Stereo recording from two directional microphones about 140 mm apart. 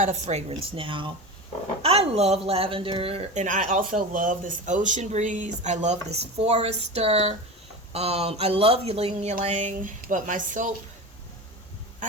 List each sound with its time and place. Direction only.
0.0 s speech: 55° right (ahead or behind)
3.4 s speech: 65° right (ahead or behind); by 9.3 s 45° right (ahead or behind)
9.4 s speech: 55° right (ahead or behind)